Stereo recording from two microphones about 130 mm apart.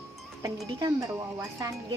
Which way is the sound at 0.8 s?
25° right (ahead or behind).